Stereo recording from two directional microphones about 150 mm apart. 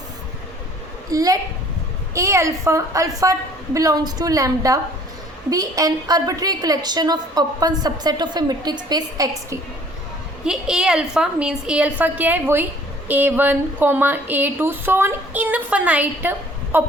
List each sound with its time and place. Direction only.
1.1 s a woman's voice: 25° right (ahead or behind)
10.4 s speech: 5° right (ahead or behind)